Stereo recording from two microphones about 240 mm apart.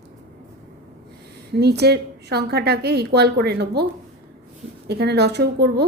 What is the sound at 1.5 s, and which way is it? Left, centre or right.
Speech, right.